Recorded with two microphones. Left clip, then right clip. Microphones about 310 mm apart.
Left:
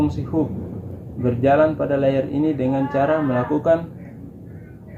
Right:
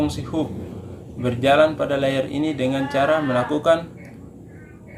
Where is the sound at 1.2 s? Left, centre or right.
Right.